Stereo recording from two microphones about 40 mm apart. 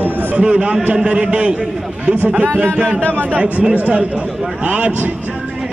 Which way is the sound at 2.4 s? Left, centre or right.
Right.